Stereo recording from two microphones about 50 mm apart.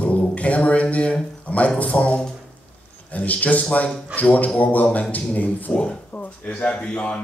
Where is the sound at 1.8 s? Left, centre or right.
Left.